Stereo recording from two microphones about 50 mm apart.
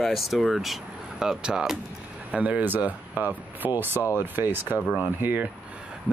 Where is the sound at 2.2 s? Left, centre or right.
Right.